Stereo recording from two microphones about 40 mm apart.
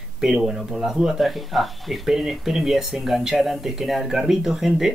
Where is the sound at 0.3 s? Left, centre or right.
Centre.